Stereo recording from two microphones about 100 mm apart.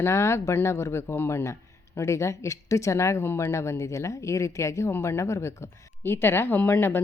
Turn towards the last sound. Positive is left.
turn(degrees=20)  # may be behind; listen again after turning